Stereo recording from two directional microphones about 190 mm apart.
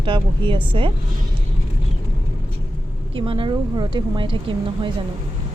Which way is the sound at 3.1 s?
25° right (ahead or behind).